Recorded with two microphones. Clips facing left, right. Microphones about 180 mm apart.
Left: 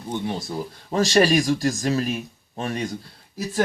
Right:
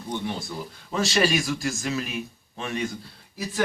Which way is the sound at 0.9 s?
40° left (ahead or behind).